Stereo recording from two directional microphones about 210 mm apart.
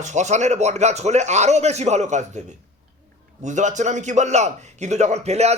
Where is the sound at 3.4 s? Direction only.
35° right (ahead or behind).